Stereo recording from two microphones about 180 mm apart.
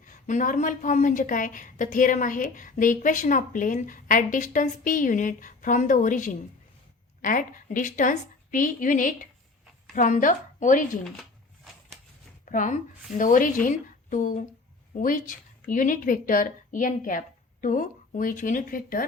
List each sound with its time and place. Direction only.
0.0 s a woman's voice: 45° left (ahead or behind)
11.0 s a sound: centre (ahead or behind)
12.5 s a woman's voice: 45° left (ahead or behind)